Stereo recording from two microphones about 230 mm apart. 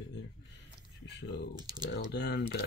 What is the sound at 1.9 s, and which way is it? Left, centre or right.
Speech, left.